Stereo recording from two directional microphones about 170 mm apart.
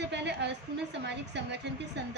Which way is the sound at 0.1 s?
90° right.